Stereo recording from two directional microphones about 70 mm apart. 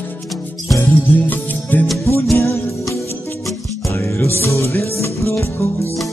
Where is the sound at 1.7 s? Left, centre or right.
Left.